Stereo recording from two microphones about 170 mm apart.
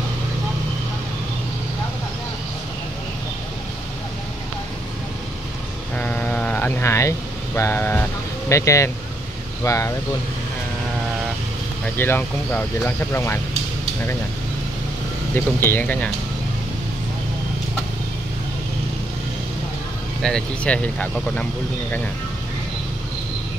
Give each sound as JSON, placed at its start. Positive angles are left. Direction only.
{"t": 5.9, "sound": "sheep", "side_deg": 10}
{"t": 9.6, "sound": "speech", "side_deg": 15}
{"t": 12.0, "sound": "speech", "side_deg": 10}
{"t": 15.3, "sound": "speech", "side_deg": 10}
{"t": 20.2, "sound": "speech", "side_deg": 5}